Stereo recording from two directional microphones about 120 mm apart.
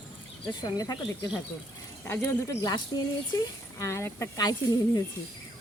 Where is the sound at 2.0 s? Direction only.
20° left (ahead or behind).